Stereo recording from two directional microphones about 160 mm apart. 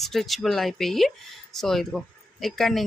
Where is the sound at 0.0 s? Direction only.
Centre (ahead or behind).